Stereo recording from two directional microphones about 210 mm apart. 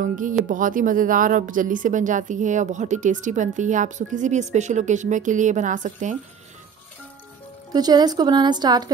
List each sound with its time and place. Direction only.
0.0 s a woman's voice: 40° right (ahead or behind)
7.7 s speech: 20° right (ahead or behind)